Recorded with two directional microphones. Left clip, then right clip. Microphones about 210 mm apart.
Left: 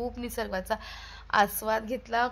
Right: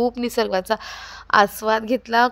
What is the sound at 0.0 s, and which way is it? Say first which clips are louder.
A woman's voice: right 13 dB; 35° right (ahead or behind).